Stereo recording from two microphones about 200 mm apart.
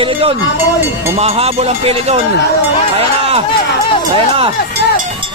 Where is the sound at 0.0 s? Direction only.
25° right (ahead or behind).